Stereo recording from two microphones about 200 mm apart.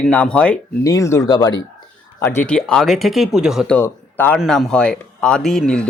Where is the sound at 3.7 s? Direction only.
10° left (ahead or behind).